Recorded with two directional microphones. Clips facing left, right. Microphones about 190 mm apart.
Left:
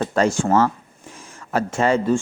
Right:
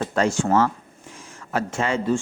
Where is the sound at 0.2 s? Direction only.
45° left (ahead or behind).